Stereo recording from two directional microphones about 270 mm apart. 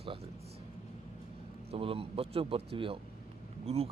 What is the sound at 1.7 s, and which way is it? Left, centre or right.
Speech, right.